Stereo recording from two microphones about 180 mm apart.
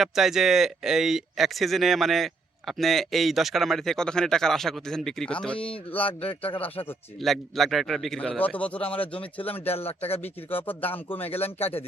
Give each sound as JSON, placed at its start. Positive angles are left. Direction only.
{"t": 0.0, "sound": "speech", "side_deg": 0}
{"t": 6.1, "sound": "a man's voice", "side_deg": 30}
{"t": 7.2, "sound": "a man's voice", "side_deg": 0}
{"t": 11.3, "sound": "a man's voice", "side_deg": 35}